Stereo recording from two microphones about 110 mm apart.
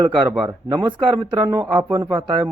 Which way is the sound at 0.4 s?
50° right (ahead or behind).